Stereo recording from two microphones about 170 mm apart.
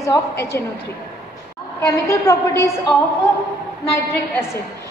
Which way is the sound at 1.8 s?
20° left (ahead or behind).